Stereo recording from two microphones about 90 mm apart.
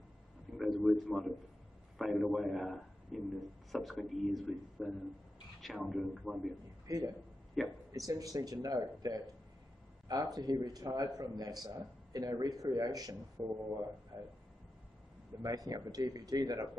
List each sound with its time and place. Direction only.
0.6 s a sound: centre (ahead or behind)
2.0 s a man's voice: centre (ahead or behind)
6.9 s a man's voice: 40° right (ahead or behind)
7.6 s a man's voice: centre (ahead or behind)
7.9 s a man's voice: 40° right (ahead or behind)
15.4 s a man's voice: 45° right (ahead or behind)